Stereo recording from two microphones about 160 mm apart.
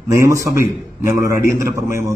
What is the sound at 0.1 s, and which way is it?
A man's voice, 20° right (ahead or behind).